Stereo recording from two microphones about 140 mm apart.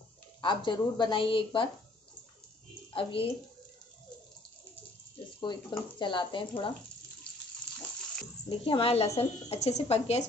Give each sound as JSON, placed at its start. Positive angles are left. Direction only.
{"t": 0.4, "sound": "a woman's voice", "side_deg": 35}
{"t": 2.9, "sound": "a woman's voice", "side_deg": 40}
{"t": 5.4, "sound": "a woman's voice", "side_deg": 35}
{"t": 8.5, "sound": "speech", "side_deg": 40}